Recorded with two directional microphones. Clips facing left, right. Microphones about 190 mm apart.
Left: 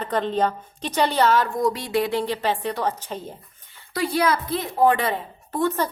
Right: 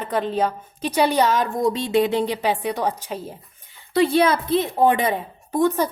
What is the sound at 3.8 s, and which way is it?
A woman's voice, 25° right (ahead or behind).